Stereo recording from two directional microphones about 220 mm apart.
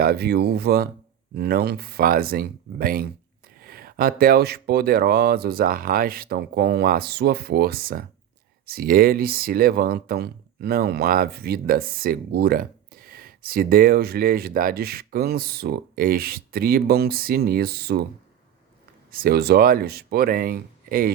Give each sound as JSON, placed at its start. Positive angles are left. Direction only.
{"t": 0.0, "sound": "speech", "side_deg": -45}
{"t": 19.1, "sound": "speech", "side_deg": -45}